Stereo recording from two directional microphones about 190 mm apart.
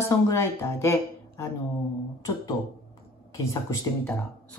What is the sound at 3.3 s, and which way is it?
Speech, 15° left (ahead or behind).